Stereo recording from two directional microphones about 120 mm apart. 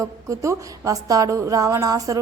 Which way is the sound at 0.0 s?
25° right (ahead or behind).